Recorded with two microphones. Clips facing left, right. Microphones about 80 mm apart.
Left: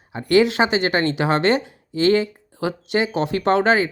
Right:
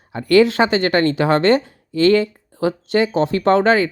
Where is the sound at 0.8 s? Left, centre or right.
Left.